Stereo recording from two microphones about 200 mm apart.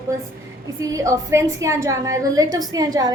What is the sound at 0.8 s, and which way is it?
A woman's voice, 15° right (ahead or behind).